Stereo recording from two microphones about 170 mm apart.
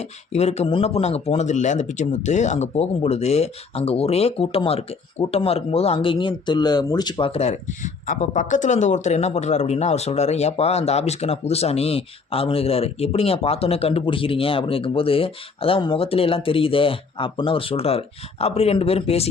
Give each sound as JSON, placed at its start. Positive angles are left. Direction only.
{"t": 0.0, "sound": "speech", "side_deg": 40}